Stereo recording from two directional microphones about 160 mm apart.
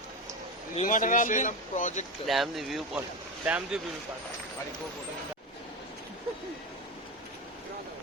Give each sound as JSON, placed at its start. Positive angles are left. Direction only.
{"t": 0.8, "sound": "a man's voice", "side_deg": 55}
{"t": 2.2, "sound": "speech", "side_deg": 0}